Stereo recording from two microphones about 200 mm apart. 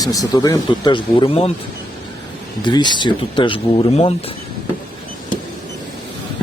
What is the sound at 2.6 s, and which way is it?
Speech, 20° left (ahead or behind).